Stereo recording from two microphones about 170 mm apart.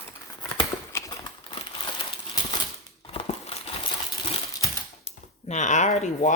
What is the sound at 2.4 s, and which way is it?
Typewriter, 25° left (ahead or behind).